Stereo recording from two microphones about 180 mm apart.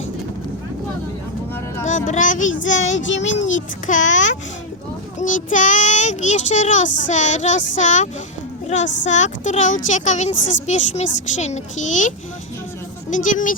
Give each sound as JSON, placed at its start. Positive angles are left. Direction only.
{"t": 2.0, "sound": "speech", "side_deg": 45}
{"t": 2.9, "sound": "child singing", "side_deg": 90}
{"t": 3.4, "sound": "speech", "side_deg": 45}
{"t": 5.2, "sound": "speech", "side_deg": 45}